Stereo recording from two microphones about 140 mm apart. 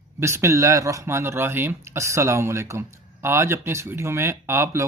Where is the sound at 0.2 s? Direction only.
20° right (ahead or behind).